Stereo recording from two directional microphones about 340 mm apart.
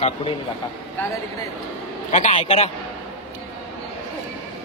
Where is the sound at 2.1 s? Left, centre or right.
Left.